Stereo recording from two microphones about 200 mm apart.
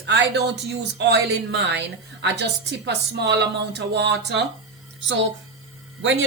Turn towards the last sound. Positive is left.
turn(degrees=-70)  # may be behind; listen again after turning